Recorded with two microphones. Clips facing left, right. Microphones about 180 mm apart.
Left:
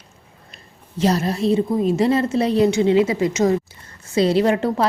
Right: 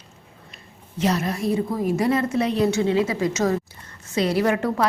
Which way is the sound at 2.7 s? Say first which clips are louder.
Left 4 dB; 20° left (ahead or behind).